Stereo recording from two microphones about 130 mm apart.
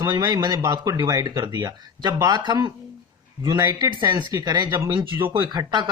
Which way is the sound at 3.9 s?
35° right (ahead or behind).